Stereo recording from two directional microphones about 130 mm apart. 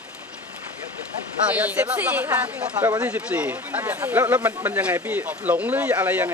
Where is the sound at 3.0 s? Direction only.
10° right (ahead or behind).